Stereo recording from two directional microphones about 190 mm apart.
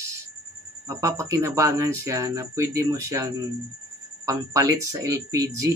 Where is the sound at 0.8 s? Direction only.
15° right (ahead or behind).